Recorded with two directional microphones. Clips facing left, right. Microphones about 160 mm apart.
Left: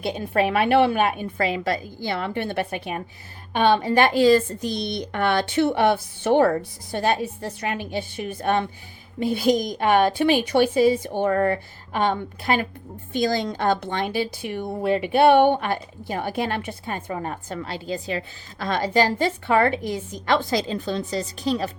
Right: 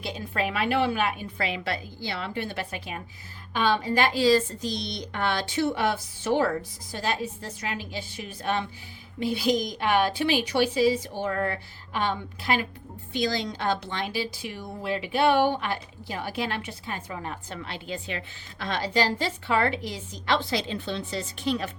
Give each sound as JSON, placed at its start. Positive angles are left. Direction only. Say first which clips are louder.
{"t": 0.0, "sound": "a woman's voice", "louder": "left 7 dB", "side_deg": 55}